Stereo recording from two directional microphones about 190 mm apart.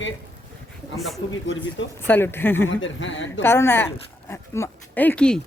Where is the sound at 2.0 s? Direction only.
10° left (ahead or behind).